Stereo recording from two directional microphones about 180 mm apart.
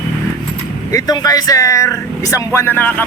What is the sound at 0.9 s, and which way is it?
Speech, 20° left (ahead or behind).